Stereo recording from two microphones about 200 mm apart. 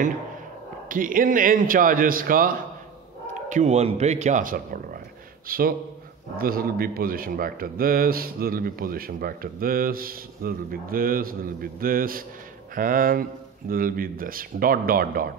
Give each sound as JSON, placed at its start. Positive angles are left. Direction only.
{"t": 0.8, "sound": "a man's voice", "side_deg": -40}